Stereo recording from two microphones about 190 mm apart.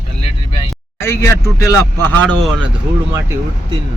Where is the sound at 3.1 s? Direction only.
15° right (ahead or behind).